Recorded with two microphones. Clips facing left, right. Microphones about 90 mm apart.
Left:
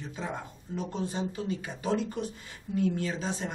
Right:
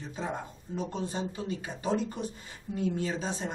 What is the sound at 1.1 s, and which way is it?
Speech, 30° right (ahead or behind).